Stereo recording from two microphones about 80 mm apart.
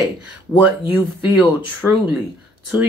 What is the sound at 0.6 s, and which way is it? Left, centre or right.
Speech, right.